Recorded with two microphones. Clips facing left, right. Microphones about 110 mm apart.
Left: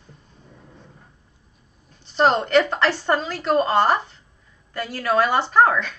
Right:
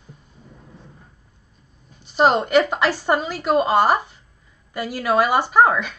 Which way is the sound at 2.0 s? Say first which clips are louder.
Right 1 dB; 10° right (ahead or behind).